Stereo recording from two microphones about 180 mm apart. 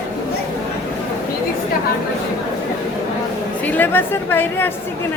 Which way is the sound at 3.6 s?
10° left (ahead or behind).